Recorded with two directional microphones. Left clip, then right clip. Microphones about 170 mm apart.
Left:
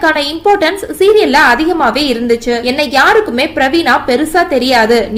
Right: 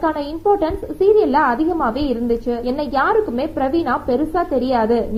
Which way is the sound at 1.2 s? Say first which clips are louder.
Left 8 dB; 40° left (ahead or behind).